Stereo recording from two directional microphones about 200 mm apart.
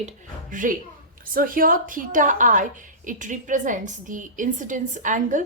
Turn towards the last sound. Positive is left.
turn(degrees=-40)  # may be behind; listen again after turning